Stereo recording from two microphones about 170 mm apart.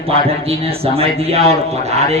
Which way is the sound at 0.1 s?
35° right (ahead or behind).